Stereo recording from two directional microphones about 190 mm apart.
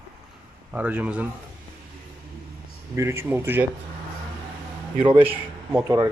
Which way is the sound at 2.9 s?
15° right (ahead or behind).